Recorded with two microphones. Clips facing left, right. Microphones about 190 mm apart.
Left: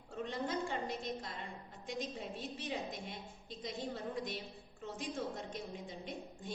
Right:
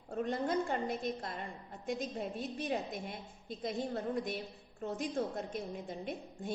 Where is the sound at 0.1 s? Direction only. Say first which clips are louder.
Right 5 dB; 55° right (ahead or behind).